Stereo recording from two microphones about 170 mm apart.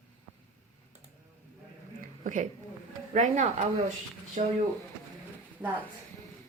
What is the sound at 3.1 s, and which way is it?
Speech, 45° right (ahead or behind).